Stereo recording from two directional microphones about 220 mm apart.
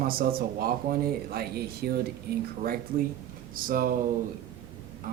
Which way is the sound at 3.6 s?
40° right (ahead or behind).